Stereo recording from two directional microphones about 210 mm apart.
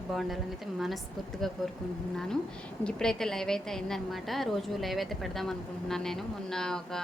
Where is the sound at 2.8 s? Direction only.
5° left (ahead or behind).